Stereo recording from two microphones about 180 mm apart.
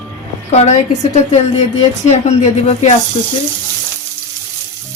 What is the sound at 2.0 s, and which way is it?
Speech, 40° left (ahead or behind).